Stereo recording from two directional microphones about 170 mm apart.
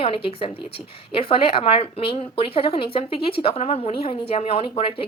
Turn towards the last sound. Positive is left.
turn(degrees=30)  # may be behind; listen again after turning